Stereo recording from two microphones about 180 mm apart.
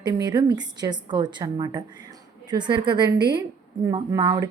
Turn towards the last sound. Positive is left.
turn(degrees=-20)  # may be behind; listen again after turning